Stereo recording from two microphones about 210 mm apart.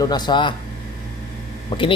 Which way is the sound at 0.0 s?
20° left (ahead or behind).